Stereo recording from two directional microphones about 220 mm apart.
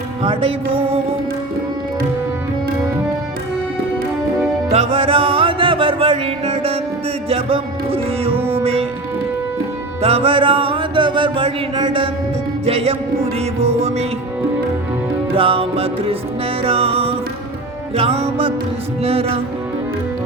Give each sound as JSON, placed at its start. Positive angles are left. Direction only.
{"t": 0.2, "sound": "music", "side_deg": -25}
{"t": 4.7, "sound": "music", "side_deg": -25}
{"t": 8.4, "sound": "music", "side_deg": -10}
{"t": 8.6, "sound": "music", "side_deg": -25}
{"t": 10.0, "sound": "music", "side_deg": -25}
{"t": 15.4, "sound": "music", "side_deg": -25}